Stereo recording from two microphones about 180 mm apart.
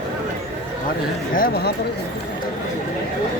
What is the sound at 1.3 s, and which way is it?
Speech, 50° left (ahead or behind).